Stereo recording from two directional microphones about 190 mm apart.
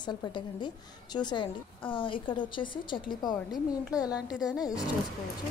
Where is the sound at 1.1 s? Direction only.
25° left (ahead or behind).